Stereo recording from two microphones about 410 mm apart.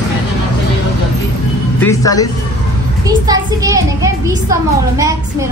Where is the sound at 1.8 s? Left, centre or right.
Centre.